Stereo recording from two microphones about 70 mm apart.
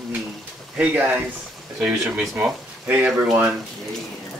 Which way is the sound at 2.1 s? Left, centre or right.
Centre.